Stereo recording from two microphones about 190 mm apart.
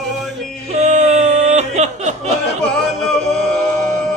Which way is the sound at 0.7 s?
40° right (ahead or behind).